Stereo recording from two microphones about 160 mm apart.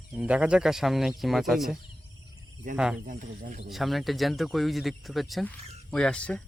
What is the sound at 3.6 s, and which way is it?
Speech, centre (ahead or behind).